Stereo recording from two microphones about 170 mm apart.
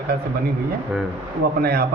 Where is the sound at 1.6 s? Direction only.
65° right (ahead or behind).